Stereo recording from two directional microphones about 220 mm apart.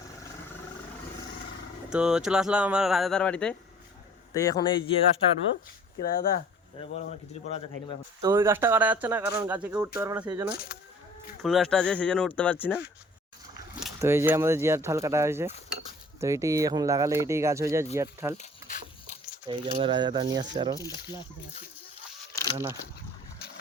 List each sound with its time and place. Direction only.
1.9 s speech: 5° right (ahead or behind)
4.4 s speech: 15° left (ahead or behind)
6.0 s speech: 45° left (ahead or behind)
6.7 s speech: 25° left (ahead or behind)
8.2 s speech: 15° right (ahead or behind)
11.4 s speech: centre (ahead or behind)
14.0 s speech: 10° right (ahead or behind)
19.5 s speech: 20° right (ahead or behind)
20.8 s speech: 20° left (ahead or behind)
22.5 s speech: 10° right (ahead or behind)